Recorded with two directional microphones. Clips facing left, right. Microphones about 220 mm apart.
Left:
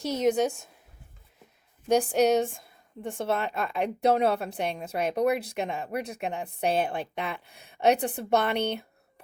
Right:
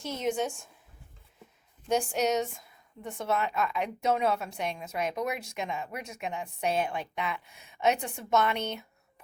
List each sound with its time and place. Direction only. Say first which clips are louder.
0.0 s a woman's voice: left 6 dB; 40° left (ahead or behind)
1.9 s a woman's voice: left 5 dB; 35° left (ahead or behind)